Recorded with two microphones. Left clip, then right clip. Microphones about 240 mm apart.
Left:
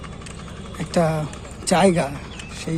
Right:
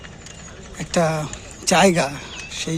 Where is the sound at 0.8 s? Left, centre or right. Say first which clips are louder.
Right 1 dB; centre.